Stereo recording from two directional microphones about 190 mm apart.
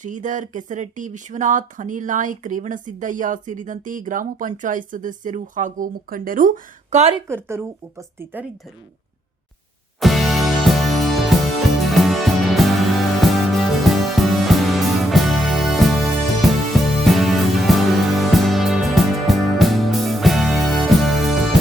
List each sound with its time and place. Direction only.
0.0 s speech: 40° right (ahead or behind)
7.3 s speech: 15° right (ahead or behind)
10.0 s music: centre (ahead or behind)